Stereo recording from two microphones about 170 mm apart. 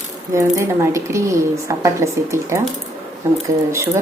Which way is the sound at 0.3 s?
15° right (ahead or behind).